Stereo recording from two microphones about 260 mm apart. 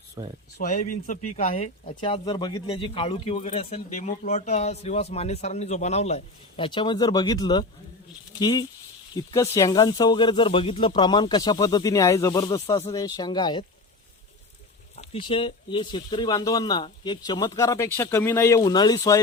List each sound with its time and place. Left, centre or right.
0.2 s speech: centre
0.6 s speech: left
14.9 s speech: left